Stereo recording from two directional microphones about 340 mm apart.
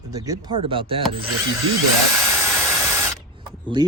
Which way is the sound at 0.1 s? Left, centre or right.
Centre.